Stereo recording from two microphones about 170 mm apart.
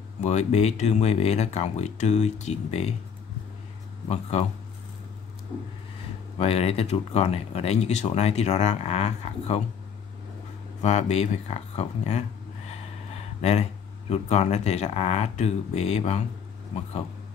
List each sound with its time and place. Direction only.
0.2 s speech: 40° left (ahead or behind)
4.1 s speech: 40° left (ahead or behind)
6.3 s speech: 35° left (ahead or behind)
10.8 s speech: 40° left (ahead or behind)
13.4 s speech: 40° left (ahead or behind)